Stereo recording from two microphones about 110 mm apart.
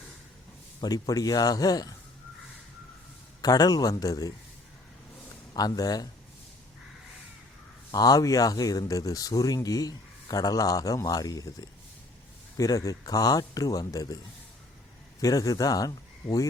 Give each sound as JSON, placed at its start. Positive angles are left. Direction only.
{"t": 0.8, "sound": "speech", "side_deg": 35}
{"t": 3.4, "sound": "speech", "side_deg": 35}
{"t": 5.5, "sound": "speech", "side_deg": 35}
{"t": 7.9, "sound": "speech", "side_deg": 35}
{"t": 12.5, "sound": "speech", "side_deg": 30}
{"t": 15.2, "sound": "speech", "side_deg": 30}